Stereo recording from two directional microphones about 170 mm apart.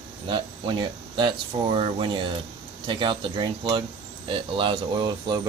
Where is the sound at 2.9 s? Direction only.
30° right (ahead or behind).